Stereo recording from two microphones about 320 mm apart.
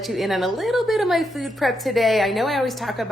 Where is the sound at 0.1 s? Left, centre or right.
Centre.